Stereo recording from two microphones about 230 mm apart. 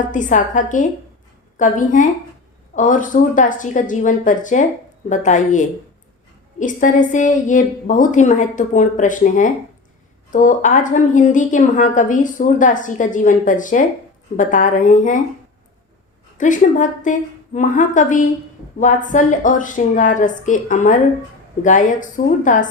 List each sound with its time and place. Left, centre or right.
0.1 s a woman's voice: left
16.4 s a woman's voice: left